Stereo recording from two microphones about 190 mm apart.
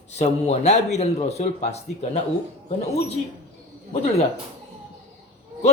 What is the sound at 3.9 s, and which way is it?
Speech, 35° left (ahead or behind).